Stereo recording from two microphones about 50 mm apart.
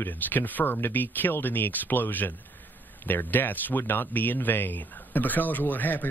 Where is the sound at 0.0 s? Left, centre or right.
Left.